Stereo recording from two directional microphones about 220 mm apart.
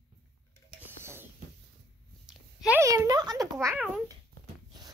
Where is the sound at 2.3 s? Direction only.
5° right (ahead or behind).